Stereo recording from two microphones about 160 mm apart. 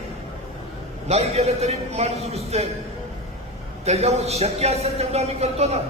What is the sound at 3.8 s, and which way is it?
A man's voice, 40° right (ahead or behind).